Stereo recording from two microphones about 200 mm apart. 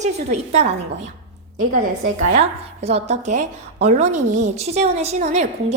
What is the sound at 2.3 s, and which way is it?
A woman's voice, 30° right (ahead or behind).